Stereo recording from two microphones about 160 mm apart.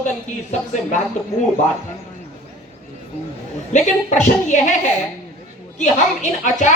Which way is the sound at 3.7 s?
50° left (ahead or behind).